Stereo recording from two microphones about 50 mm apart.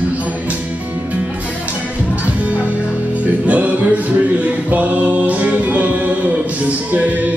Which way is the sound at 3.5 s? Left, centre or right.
Right.